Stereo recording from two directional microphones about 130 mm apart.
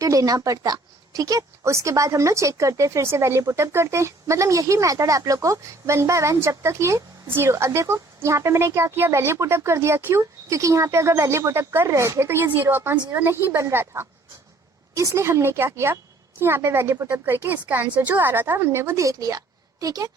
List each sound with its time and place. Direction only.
0.0 s a woman's voice: 25° right (ahead or behind)